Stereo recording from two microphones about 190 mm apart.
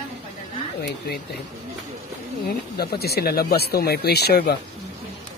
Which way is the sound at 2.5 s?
55° left (ahead or behind).